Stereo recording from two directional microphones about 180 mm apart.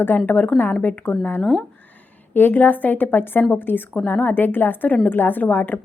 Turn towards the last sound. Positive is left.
turn(degrees=10)  # may be behind; listen again after turning